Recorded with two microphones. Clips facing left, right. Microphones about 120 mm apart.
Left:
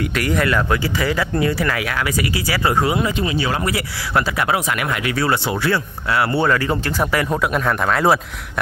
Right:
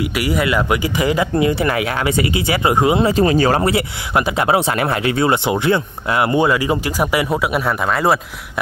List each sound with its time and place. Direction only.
0.2 s speech: 10° right (ahead or behind)
3.1 s speech: 40° right (ahead or behind)
3.6 s speech: 25° right (ahead or behind); by 8.2 s 5° right (ahead or behind)